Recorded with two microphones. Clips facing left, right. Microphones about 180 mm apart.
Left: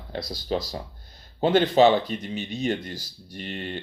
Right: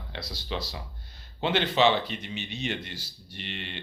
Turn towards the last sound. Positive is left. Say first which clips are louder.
# left 6 dB
turn(degrees=40)  # may be behind; listen again after turning